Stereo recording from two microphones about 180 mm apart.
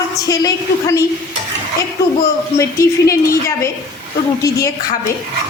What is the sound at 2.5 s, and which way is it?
Speech, 15° left (ahead or behind).